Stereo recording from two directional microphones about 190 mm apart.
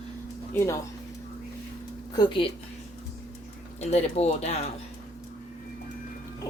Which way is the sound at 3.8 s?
35° left (ahead or behind).